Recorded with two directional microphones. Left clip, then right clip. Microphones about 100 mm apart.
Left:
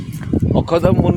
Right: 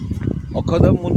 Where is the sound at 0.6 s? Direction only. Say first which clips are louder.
Left 2 dB; 70° left (ahead or behind).